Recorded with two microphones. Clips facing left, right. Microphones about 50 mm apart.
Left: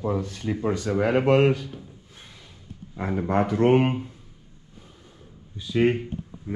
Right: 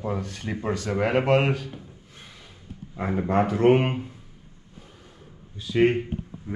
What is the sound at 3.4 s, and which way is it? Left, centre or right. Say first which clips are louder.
Speech: even; right.